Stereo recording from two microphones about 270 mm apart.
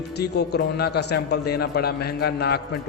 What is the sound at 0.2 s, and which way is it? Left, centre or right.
A man's voice, left.